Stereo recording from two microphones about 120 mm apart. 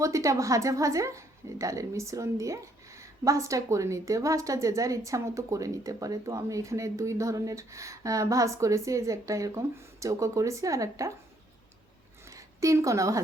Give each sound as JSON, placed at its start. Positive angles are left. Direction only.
{"t": 0.0, "sound": "a woman's voice", "side_deg": -25}
{"t": 12.3, "sound": "a woman's voice", "side_deg": -25}